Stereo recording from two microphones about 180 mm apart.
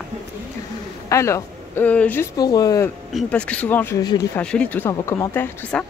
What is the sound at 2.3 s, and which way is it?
Speech, 20° left (ahead or behind).